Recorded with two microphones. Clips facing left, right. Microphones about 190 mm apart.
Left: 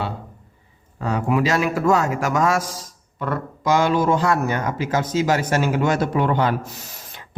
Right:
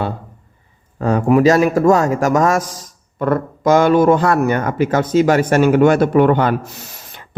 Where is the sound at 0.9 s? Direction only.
45° right (ahead or behind).